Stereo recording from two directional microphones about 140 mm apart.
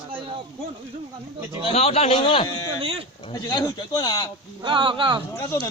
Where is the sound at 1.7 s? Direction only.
45° left (ahead or behind).